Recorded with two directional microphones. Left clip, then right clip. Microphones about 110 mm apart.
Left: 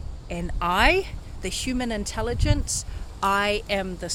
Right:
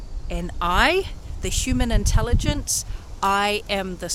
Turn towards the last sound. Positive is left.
turn(degrees=-50)  # may be behind; listen again after turning